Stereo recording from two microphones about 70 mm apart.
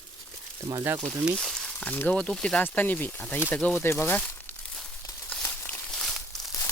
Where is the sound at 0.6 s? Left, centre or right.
Right.